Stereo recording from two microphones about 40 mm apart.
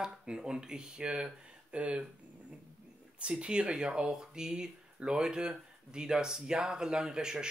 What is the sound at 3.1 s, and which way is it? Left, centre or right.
Speech, right.